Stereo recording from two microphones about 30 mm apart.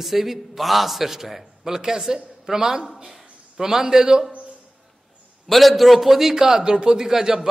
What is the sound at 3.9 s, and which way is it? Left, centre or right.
Speech, right.